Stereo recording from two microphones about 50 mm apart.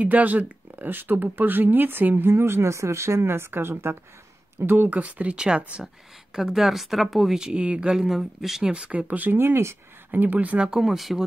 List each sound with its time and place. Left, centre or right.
0.0 s speech: right
4.6 s speech: right; by 5.6 s centre
6.3 s speech: centre; by 7.9 s right
7.9 s speech: centre
8.7 s speech: right
9.4 s speech: right
10.1 s speech: right
10.6 s speech: centre